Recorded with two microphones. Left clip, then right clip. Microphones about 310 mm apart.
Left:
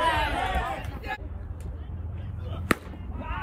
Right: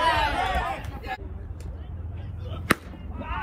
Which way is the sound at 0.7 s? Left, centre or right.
Centre.